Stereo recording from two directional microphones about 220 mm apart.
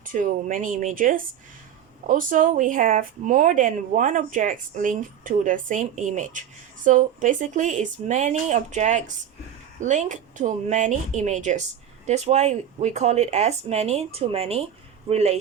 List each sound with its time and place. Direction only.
0.0 s speech: 40° right (ahead or behind)